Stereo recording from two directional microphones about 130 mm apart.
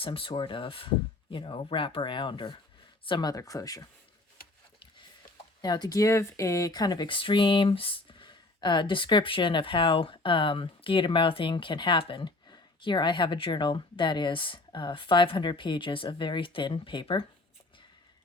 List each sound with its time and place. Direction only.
0.0 s speech: 45° left (ahead or behind); by 3.8 s 25° left (ahead or behind)
5.6 s speech: 35° left (ahead or behind)